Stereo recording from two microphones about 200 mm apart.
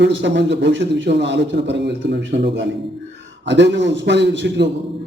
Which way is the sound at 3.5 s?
60° right (ahead or behind).